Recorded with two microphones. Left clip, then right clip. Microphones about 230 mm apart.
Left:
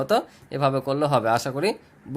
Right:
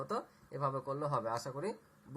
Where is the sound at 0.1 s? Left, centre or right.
Left.